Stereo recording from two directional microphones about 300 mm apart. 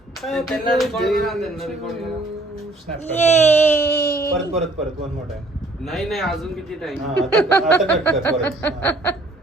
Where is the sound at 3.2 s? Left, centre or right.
Centre.